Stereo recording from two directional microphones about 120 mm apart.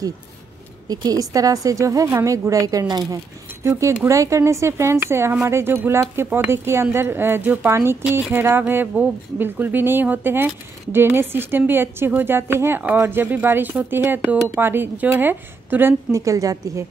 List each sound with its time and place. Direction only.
0.8 s speech: 35° right (ahead or behind); by 16.2 s 15° right (ahead or behind)
16.2 s speech: 30° right (ahead or behind)